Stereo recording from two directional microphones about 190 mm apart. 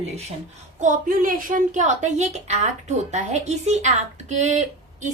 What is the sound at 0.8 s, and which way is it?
A woman's voice, 45° right (ahead or behind).